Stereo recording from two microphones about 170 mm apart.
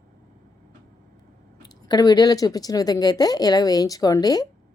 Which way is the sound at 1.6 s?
25° left (ahead or behind).